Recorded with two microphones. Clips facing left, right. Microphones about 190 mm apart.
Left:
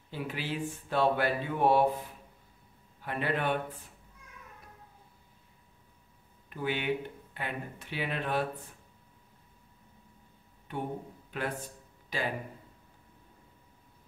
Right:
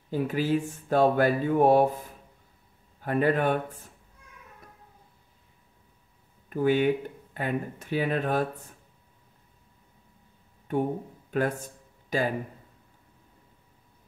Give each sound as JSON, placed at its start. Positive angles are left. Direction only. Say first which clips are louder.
{"t": 0.1, "sound": "speech", "louder": "right 10 dB", "side_deg": -45}
{"t": 3.0, "sound": "a man's voice", "louder": "right 8 dB", "side_deg": -45}
{"t": 6.5, "sound": "speech", "louder": "right 9 dB", "side_deg": -45}
{"t": 10.7, "sound": "speech", "louder": "right 9 dB", "side_deg": -45}